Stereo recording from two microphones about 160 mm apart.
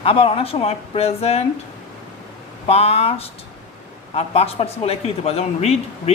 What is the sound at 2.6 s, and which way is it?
Speech, 40° left (ahead or behind).